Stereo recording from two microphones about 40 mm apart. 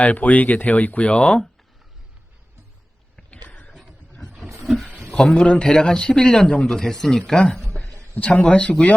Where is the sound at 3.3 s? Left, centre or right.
Left.